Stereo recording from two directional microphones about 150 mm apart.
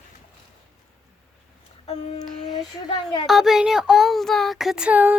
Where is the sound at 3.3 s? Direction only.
Centre (ahead or behind).